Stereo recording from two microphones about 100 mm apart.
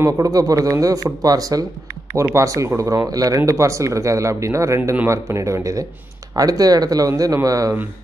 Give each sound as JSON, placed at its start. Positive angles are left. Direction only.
{"t": 0.0, "sound": "speech", "side_deg": -35}